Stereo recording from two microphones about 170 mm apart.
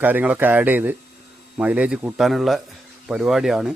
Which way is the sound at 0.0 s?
10° right (ahead or behind).